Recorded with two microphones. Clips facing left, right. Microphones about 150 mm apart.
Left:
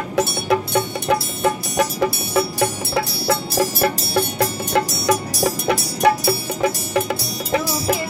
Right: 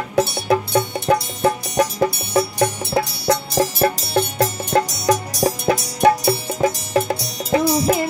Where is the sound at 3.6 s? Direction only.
30° right (ahead or behind).